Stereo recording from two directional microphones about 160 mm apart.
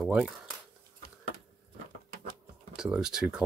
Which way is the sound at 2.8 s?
5° right (ahead or behind).